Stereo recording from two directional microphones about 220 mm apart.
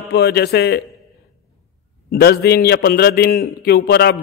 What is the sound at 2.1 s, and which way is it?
A man's voice, 45° left (ahead or behind).